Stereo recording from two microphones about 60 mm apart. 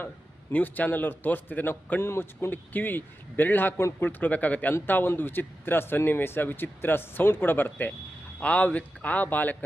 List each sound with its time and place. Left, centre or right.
0.5 s speech: left
2.0 s speech: left
2.5 s speech: left